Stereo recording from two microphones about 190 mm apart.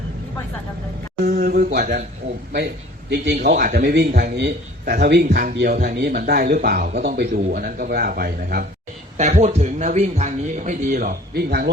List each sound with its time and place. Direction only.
1.2 s a man's voice: 50° right (ahead or behind)
3.1 s a man's voice: 60° right (ahead or behind)
9.1 s speech: 40° right (ahead or behind); by 11.7 s 55° right (ahead or behind)